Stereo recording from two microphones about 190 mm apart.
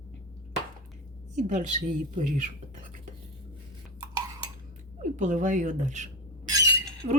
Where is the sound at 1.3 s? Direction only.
40° right (ahead or behind).